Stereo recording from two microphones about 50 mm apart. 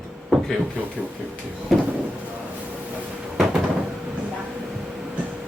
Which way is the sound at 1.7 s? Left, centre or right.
Centre.